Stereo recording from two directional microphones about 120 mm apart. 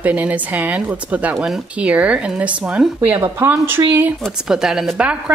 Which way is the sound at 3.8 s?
30° right (ahead or behind).